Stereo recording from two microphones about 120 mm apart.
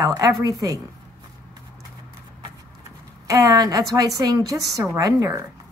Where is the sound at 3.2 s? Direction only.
30° right (ahead or behind).